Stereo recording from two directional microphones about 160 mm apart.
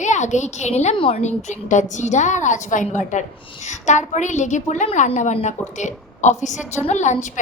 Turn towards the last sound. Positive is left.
turn(degrees=50)  # may be behind; listen again after turning